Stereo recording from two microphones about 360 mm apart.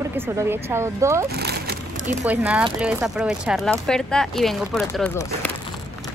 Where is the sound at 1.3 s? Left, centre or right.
Right.